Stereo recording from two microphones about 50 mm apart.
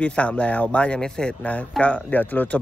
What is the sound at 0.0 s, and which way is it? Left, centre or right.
Speech, left.